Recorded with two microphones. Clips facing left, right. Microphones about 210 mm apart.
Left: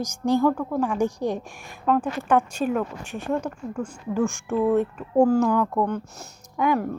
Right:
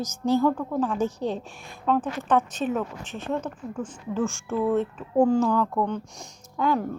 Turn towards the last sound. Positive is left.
turn(degrees=15)  # may be behind; listen again after turning